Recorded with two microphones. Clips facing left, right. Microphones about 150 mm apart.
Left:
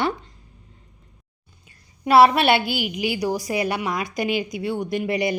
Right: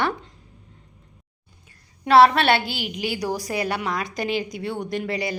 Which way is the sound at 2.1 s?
10° left (ahead or behind).